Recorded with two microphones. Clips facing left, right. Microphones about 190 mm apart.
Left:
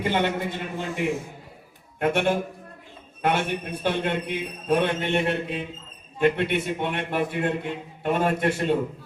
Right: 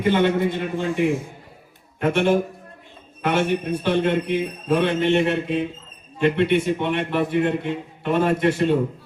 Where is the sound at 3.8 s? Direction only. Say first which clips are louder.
Right 3 dB; 55° left (ahead or behind).